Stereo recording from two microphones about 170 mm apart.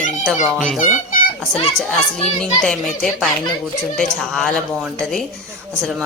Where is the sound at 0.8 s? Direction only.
50° left (ahead or behind).